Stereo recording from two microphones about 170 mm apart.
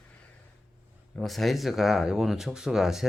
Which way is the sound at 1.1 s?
Centre (ahead or behind).